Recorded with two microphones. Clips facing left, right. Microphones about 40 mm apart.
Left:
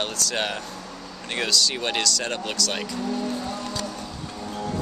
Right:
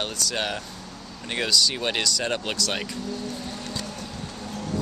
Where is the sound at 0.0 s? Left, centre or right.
Centre.